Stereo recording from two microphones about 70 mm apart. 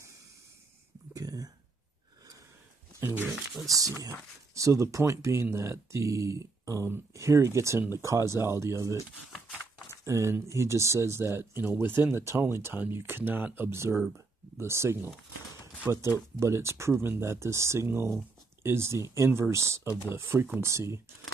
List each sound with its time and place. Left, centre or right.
1.1 s a sound: right
3.0 s speech: right
4.0 s speech: right
10.0 s speech: right